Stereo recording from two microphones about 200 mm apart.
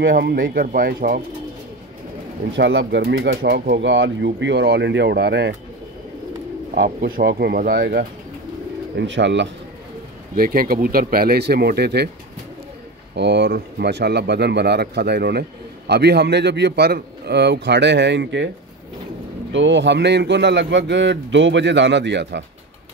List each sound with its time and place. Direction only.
0.0 s speech: 50° right (ahead or behind)
2.5 s speech: 60° right (ahead or behind)
6.7 s speech: 45° right (ahead or behind)
8.9 s speech: 65° right (ahead or behind)
10.3 s speech: 45° right (ahead or behind)
13.1 s speech: 60° right (ahead or behind)
19.5 s speech: 65° right (ahead or behind)